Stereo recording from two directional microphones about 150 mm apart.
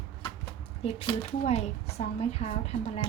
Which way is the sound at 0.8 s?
40° left (ahead or behind).